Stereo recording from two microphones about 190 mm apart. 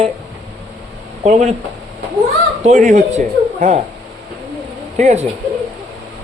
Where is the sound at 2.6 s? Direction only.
40° right (ahead or behind).